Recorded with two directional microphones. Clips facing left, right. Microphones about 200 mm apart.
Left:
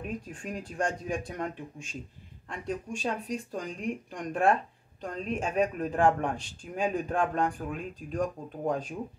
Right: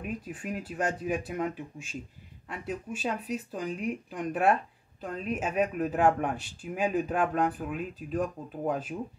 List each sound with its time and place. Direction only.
0.0 s speech: 5° right (ahead or behind)